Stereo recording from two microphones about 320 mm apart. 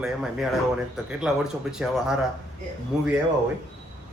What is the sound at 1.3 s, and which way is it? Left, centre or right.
Speech, centre.